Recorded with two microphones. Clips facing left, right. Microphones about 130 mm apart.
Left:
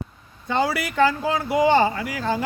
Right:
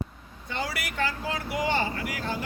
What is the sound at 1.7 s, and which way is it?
Speech, 90° left.